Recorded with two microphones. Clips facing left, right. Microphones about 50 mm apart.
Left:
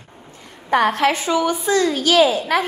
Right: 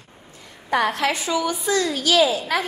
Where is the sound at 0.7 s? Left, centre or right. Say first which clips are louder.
Left 4 dB; left.